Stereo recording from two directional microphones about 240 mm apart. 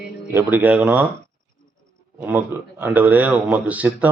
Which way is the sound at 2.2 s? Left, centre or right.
Centre.